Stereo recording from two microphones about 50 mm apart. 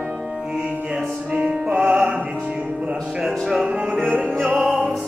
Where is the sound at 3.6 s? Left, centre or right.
Centre.